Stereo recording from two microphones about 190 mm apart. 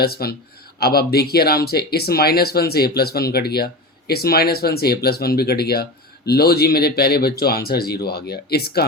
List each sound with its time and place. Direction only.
0.0 s speech: 55° left (ahead or behind)